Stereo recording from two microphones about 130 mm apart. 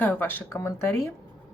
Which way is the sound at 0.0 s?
15° left (ahead or behind).